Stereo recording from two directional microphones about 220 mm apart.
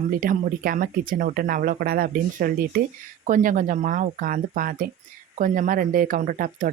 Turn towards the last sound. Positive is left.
turn(degrees=-40)  # may be behind; listen again after turning